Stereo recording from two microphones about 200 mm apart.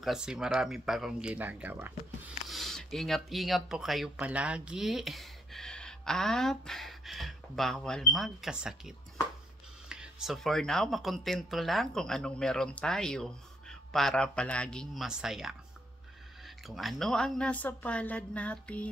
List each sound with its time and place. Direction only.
0.0 s speech: centre (ahead or behind)